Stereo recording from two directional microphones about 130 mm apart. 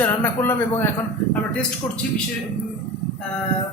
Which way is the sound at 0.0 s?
15° left (ahead or behind).